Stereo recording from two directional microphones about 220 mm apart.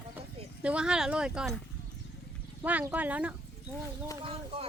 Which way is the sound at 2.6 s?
5° right (ahead or behind).